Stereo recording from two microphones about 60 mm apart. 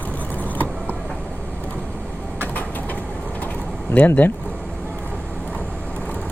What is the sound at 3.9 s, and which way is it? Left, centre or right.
Speech, left.